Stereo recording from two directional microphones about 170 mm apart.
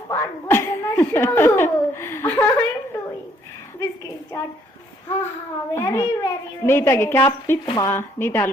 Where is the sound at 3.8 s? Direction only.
20° left (ahead or behind).